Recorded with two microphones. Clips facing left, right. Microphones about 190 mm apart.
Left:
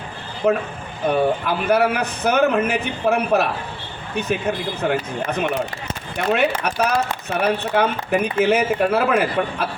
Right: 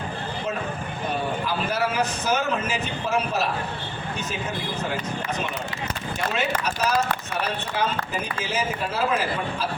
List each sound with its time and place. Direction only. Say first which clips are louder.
0.4 s a man's voice: left 12 dB; 55° left (ahead or behind)